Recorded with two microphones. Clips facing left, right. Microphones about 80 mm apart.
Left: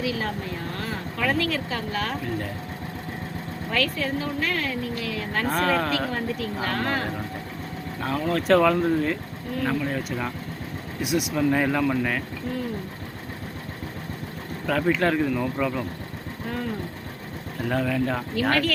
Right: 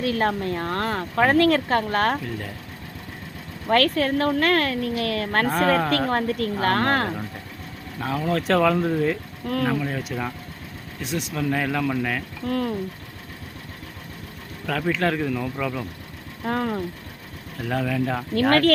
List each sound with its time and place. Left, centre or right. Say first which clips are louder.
0.0 s speech: right 5 dB; right
3.7 s speech: right 7 dB; right
5.5 s speech: right 1 dB; centre
6.1 s speech: right 5 dB; right
8.0 s speech: even; centre
12.5 s speech: right 6 dB; right
14.7 s speech: left 1 dB; centre
16.5 s speech: right 6 dB; right
17.7 s speech: even; centre